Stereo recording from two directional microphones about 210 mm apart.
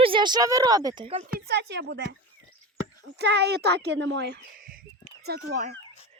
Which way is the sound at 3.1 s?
55° right (ahead or behind).